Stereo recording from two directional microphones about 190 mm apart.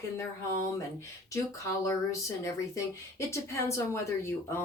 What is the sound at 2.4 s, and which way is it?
Speech, 15° left (ahead or behind).